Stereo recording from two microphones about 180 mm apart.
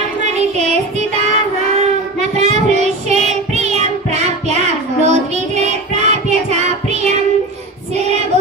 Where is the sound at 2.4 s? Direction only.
40° right (ahead or behind).